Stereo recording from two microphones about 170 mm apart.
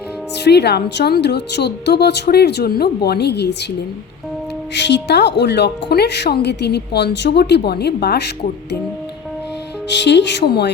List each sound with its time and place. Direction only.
0.4 s a woman's voice: 80° left
4.7 s a woman's voice: 90° left
10.0 s speech: 90° left